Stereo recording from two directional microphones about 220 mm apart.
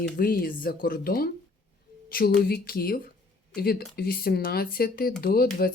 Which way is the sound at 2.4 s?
45° left (ahead or behind).